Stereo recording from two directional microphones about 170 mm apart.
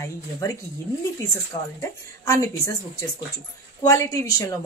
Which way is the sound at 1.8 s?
20° left (ahead or behind).